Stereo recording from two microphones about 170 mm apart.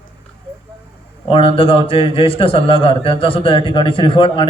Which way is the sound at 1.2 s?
30° left (ahead or behind).